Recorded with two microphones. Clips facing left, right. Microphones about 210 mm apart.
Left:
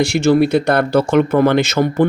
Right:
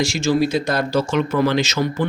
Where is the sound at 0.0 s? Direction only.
60° left (ahead or behind).